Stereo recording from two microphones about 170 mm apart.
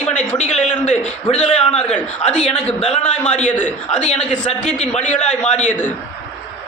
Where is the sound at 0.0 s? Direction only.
10° left (ahead or behind).